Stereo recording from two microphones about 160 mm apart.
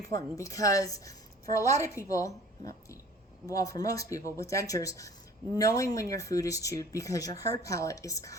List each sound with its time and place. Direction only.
0.1 s a woman's voice: 20° left (ahead or behind)